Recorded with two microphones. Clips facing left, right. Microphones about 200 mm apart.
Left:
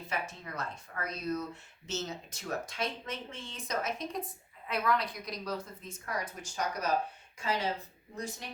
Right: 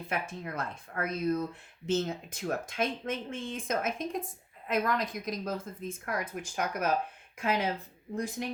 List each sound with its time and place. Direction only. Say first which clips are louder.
0.0 s speech: right 3 dB; 55° right (ahead or behind)